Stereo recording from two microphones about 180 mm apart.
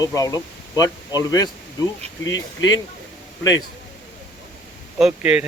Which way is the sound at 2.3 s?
90° left.